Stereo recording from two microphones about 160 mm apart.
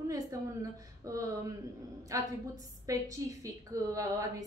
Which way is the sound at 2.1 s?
20° right (ahead or behind).